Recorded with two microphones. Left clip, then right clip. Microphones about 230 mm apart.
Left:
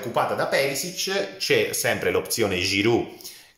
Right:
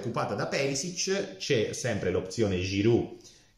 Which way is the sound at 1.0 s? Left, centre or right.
Centre.